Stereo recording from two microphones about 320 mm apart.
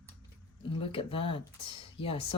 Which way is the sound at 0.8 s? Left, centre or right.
Centre.